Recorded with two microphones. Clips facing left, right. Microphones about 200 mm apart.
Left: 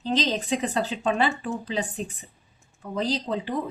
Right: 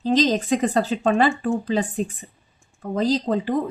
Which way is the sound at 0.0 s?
45° right (ahead or behind).